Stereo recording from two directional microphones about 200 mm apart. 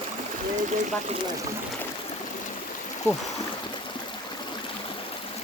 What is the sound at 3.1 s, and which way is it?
Speech, 10° left (ahead or behind).